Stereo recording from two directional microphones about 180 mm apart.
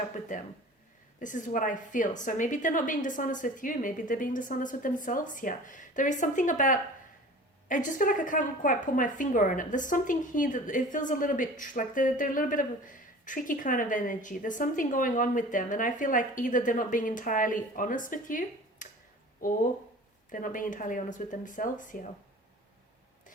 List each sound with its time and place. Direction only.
1.2 s speech: 45° left (ahead or behind)
20.3 s speech: 45° left (ahead or behind)